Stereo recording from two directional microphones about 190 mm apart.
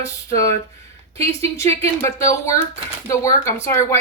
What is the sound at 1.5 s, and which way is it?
Speech, 15° left (ahead or behind).